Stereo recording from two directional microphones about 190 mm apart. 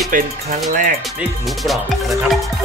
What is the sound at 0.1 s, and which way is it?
Speech, 45° right (ahead or behind).